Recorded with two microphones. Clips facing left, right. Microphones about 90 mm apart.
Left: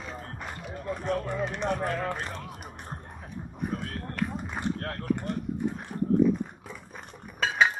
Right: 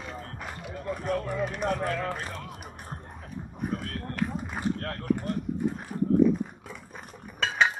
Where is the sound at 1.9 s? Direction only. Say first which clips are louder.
Even; 25° left (ahead or behind).